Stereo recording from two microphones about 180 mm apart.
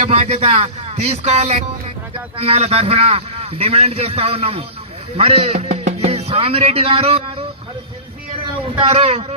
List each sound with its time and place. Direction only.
0.0 s a man's voice: 35° right (ahead or behind)
8.8 s a man's voice: 35° right (ahead or behind)